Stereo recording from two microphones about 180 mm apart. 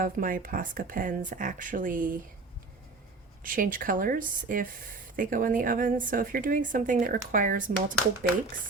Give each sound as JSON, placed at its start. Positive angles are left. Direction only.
{"t": 0.0, "sound": "a woman's voice", "side_deg": -50}
{"t": 3.4, "sound": "a woman's voice", "side_deg": -50}